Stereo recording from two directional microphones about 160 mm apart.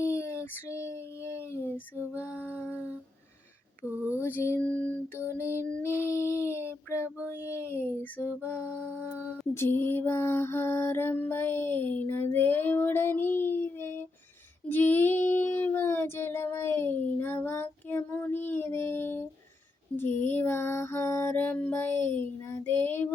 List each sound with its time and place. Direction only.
0.1 s a sound: 20° left (ahead or behind)
2.3 s female singing: 10° right (ahead or behind)
2.6 s humming: 5° right (ahead or behind)
4.1 s music: 15° left (ahead or behind)
6.5 s child singing: 15° left (ahead or behind)
7.3 s female singing: 15° left (ahead or behind)
9.6 s music: 15° left (ahead or behind)
14.7 s child singing: 10° left (ahead or behind)
20.0 s mantra: 15° left (ahead or behind)
22.6 s child singing: 10° left (ahead or behind)